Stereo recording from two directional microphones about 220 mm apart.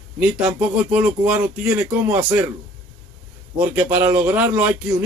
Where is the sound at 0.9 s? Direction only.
5° right (ahead or behind).